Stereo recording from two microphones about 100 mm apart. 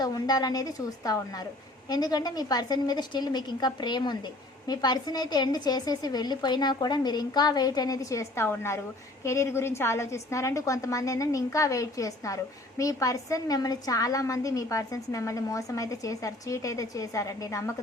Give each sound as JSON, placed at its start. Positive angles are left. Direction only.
{"t": 0.0, "sound": "a woman's voice", "side_deg": 40}